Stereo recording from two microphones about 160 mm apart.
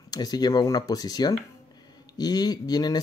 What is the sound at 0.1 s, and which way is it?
Speech, 25° left (ahead or behind).